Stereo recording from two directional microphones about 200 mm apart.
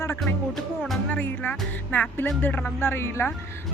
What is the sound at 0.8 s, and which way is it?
Speech, 5° left (ahead or behind).